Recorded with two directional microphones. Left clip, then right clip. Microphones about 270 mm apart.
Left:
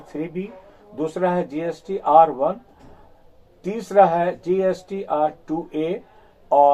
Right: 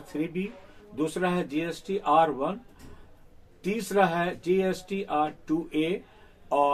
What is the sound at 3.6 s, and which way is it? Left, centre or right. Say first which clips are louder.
Speech: left 9 dB; centre.